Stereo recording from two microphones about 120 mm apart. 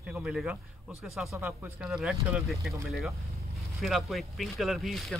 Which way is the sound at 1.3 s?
15° right (ahead or behind).